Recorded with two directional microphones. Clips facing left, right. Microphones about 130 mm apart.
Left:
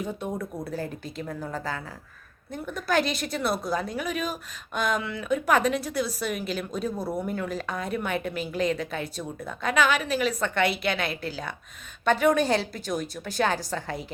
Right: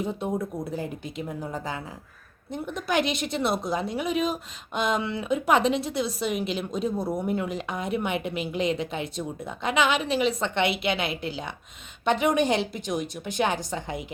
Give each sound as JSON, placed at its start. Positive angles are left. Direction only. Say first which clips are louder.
{"t": 0.0, "sound": "a woman's voice", "louder": "right 3 dB", "side_deg": -25}